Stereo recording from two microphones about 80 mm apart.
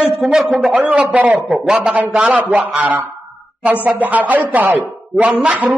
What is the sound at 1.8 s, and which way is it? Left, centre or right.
A man's voice, centre.